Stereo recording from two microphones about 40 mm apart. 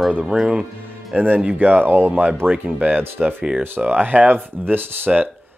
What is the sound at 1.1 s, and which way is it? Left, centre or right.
Speech, right.